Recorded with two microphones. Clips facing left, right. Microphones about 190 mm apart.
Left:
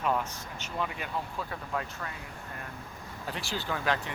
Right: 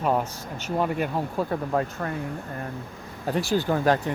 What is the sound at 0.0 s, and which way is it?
Speech, 40° right (ahead or behind).